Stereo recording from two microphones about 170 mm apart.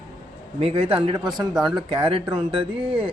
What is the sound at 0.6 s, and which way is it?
Speech, 35° right (ahead or behind).